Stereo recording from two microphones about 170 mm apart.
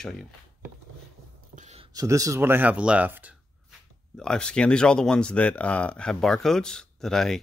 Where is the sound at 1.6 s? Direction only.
40° right (ahead or behind).